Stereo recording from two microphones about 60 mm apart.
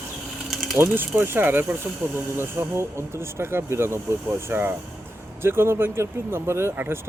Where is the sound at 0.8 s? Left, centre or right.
Right.